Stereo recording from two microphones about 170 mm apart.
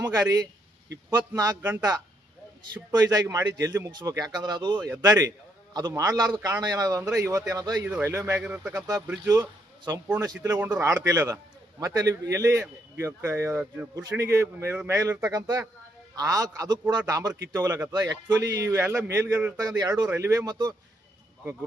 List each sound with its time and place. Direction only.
0.0 s a man's voice: 20° right (ahead or behind)
2.9 s a man's voice: 20° right (ahead or behind)
9.2 s a man's voice: 20° right (ahead or behind)